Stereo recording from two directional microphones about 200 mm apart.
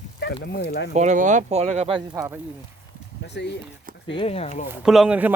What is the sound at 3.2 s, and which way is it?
Speech, 60° left (ahead or behind).